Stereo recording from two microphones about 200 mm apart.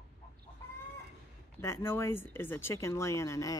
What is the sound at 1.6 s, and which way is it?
Speech, 15° left (ahead or behind).